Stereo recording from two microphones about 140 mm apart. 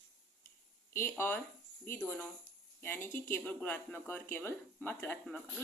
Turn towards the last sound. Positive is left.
turn(degrees=10)  # may be behind; listen again after turning